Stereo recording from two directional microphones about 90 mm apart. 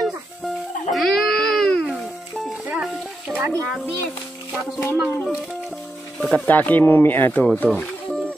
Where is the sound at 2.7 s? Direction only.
10° right (ahead or behind).